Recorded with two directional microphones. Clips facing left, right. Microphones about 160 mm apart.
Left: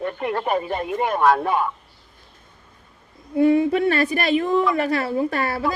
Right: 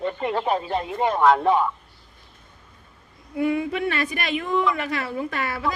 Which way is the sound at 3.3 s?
30° left (ahead or behind).